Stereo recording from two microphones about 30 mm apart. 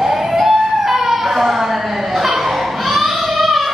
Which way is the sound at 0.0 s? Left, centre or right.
Centre.